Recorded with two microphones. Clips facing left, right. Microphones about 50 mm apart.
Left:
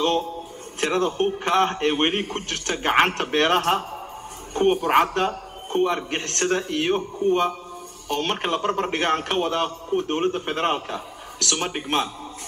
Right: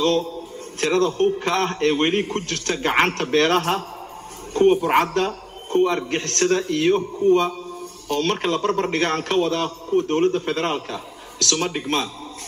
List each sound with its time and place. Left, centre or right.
0.0 s a man's voice: left
4.8 s a man's voice: centre